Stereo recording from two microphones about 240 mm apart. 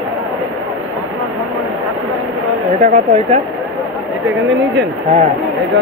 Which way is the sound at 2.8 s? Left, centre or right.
Right.